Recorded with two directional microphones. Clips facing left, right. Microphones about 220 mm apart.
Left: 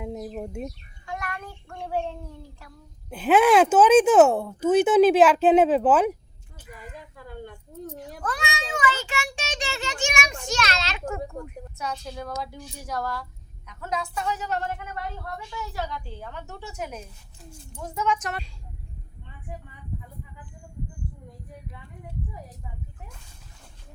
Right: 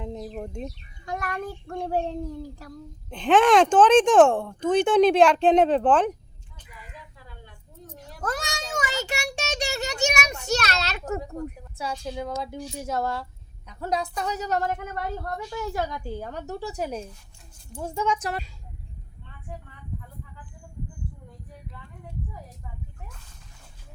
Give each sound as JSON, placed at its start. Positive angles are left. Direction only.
{"t": 0.0, "sound": "a sound", "side_deg": 10}
{"t": 1.0, "sound": "child singing", "side_deg": -40}
{"t": 2.6, "sound": "a woman's voice", "side_deg": -40}
{"t": 3.1, "sound": "speech", "side_deg": 5}
{"t": 6.7, "sound": "a sound", "side_deg": 50}
{"t": 8.2, "sound": "a sound", "side_deg": -45}
{"t": 9.0, "sound": "a woman's voice", "side_deg": -40}
{"t": 11.9, "sound": "speech", "side_deg": -10}
{"t": 12.2, "sound": "a woman's voice", "side_deg": -20}